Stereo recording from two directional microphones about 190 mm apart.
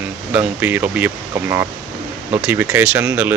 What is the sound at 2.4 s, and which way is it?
Speech, 10° right (ahead or behind).